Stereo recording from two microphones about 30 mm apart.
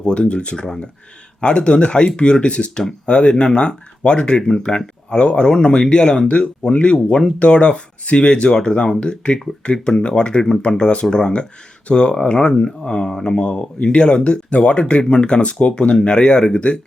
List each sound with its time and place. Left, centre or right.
0.0 s speech: left
11.9 s speech: left
13.5 s speech: left
13.8 s speech: left